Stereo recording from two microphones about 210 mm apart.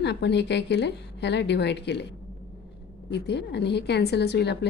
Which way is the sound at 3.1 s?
55° left (ahead or behind).